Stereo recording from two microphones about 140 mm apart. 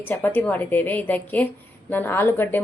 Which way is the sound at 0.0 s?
15° left (ahead or behind).